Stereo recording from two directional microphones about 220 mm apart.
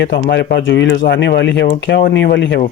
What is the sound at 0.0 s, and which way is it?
Speech, 50° left (ahead or behind).